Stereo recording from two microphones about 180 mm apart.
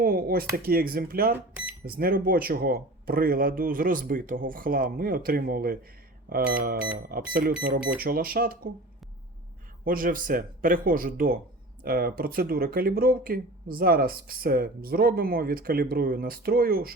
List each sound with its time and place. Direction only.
0.0 s speech: 55° right (ahead or behind)
9.8 s speech: 50° right (ahead or behind)